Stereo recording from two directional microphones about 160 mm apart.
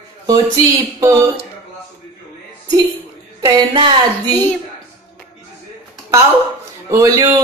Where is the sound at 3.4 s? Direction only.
25° right (ahead or behind).